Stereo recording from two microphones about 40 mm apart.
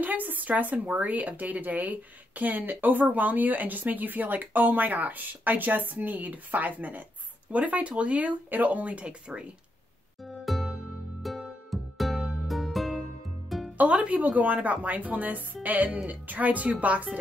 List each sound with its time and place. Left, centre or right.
0.0 s a woman's voice: right
8.5 s a woman's voice: right
10.4 s music: centre
14.0 s a woman's voice: right